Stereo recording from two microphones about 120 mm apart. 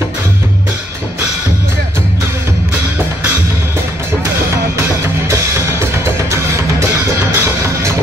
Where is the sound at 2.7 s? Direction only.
15° right (ahead or behind).